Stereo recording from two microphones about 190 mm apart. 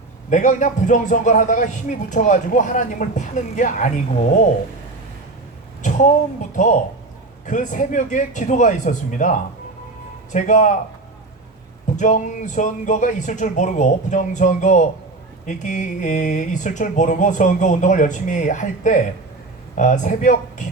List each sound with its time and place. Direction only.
0.3 s a man's voice: 40° left (ahead or behind)
5.8 s a sound: 40° left (ahead or behind)
7.4 s a man's voice: 40° left (ahead or behind)
11.9 s speech: 40° left (ahead or behind)